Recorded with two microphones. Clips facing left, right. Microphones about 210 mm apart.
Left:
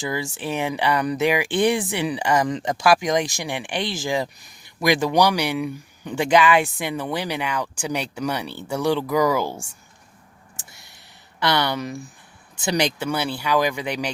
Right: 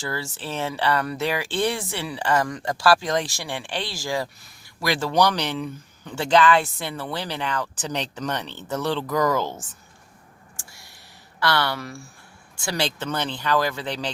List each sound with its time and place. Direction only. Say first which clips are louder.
0.0 s speech: left 4 dB; 15° left (ahead or behind)
10.6 s a sound: even; 20° left (ahead or behind)
11.3 s speech: left 2 dB; 20° left (ahead or behind)